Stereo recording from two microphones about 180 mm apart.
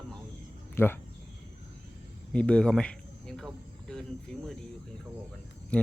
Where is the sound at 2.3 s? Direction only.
5° left (ahead or behind).